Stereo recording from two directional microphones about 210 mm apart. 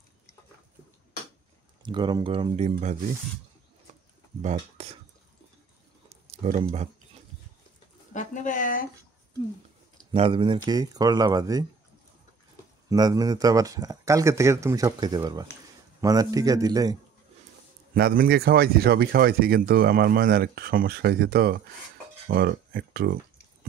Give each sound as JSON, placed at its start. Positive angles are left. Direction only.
{"t": 1.8, "sound": "speech", "side_deg": -20}
{"t": 4.4, "sound": "speech", "side_deg": -35}
{"t": 6.0, "sound": "a sound", "side_deg": -30}
{"t": 8.1, "sound": "speech", "side_deg": 35}
{"t": 10.1, "sound": "speech", "side_deg": -25}
{"t": 12.9, "sound": "speech", "side_deg": -20}
{"t": 17.9, "sound": "speech", "side_deg": -45}